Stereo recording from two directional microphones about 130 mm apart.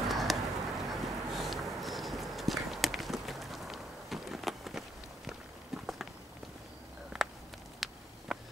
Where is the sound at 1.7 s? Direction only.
Centre (ahead or behind).